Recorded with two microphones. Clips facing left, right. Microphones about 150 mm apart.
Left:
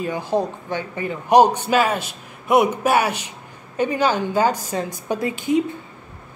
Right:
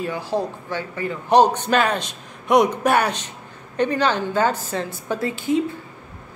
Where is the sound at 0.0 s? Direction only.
20° left (ahead or behind).